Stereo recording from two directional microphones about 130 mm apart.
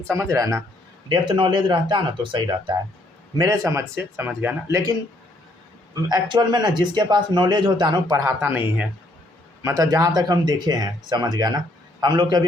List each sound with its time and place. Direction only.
0.1 s speech: 20° right (ahead or behind)
1.1 s speech: 40° right (ahead or behind)
3.3 s speech: 30° right (ahead or behind)
4.7 s speech: 30° right (ahead or behind)
8.2 s speech: 20° right (ahead or behind)
9.6 s speech: 25° right (ahead or behind)